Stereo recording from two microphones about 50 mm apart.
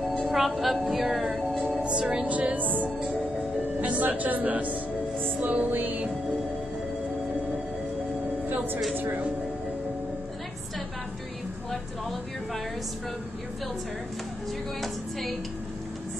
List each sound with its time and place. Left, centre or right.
0.3 s a woman's voice: centre
1.8 s a woman's voice: right
2.2 s speech: right
8.5 s a sound: right
8.9 s speech: right